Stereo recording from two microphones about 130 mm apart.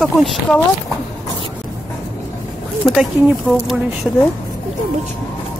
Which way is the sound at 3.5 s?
5° right (ahead or behind).